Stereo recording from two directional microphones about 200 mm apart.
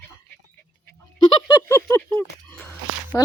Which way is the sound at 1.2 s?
25° left (ahead or behind).